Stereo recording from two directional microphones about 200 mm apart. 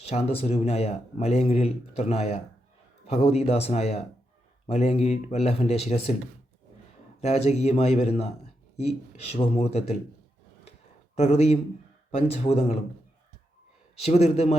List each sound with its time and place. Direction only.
0.0 s speech: 30° left (ahead or behind)
7.2 s speech: 35° left (ahead or behind)
9.3 s speech: 30° left (ahead or behind)
11.2 s speech: 35° left (ahead or behind)
13.9 s speech: 30° left (ahead or behind)